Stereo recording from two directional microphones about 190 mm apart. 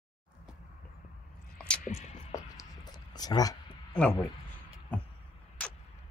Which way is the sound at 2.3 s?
20° left (ahead or behind).